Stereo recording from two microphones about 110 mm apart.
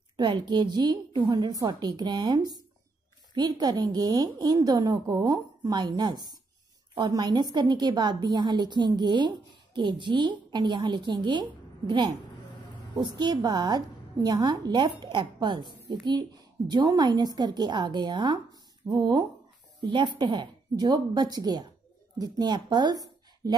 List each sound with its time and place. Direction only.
0.2 s a woman's voice: 40° right (ahead or behind)
13.0 s a woman's voice: 40° right (ahead or behind)